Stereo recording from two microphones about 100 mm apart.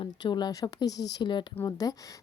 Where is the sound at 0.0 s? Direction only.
50° left (ahead or behind).